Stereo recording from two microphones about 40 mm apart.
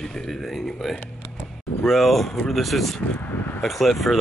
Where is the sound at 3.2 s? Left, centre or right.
Left.